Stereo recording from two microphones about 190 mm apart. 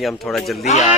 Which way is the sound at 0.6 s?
35° left (ahead or behind).